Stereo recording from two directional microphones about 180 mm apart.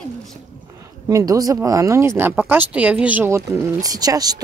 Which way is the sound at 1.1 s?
20° right (ahead or behind).